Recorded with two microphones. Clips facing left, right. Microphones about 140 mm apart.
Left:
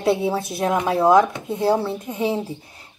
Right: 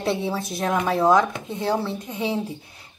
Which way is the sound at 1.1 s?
5° left (ahead or behind).